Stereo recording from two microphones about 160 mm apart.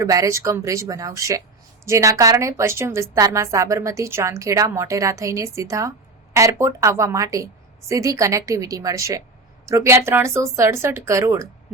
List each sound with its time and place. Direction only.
0.0 s a woman's voice: 20° right (ahead or behind)